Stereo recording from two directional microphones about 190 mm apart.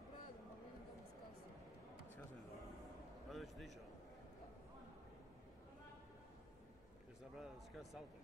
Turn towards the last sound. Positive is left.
turn(degrees=0)  # may be behind; listen again after turning